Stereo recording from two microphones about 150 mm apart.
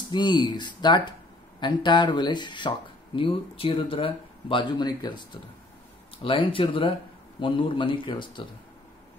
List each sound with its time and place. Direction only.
0.1 s speech: 30° left (ahead or behind)